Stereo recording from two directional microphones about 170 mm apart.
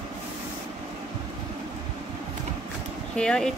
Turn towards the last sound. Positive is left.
turn(degrees=5)  # may be behind; listen again after turning